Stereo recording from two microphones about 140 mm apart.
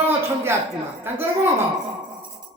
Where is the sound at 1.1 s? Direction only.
15° right (ahead or behind).